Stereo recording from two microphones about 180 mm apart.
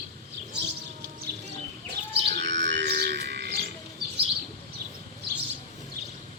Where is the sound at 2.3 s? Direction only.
75° right (ahead or behind).